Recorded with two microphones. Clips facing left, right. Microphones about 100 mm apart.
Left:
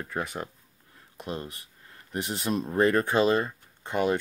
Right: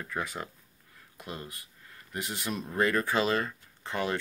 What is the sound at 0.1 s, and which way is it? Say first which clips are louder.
Speech: left 1 dB; 20° left (ahead or behind).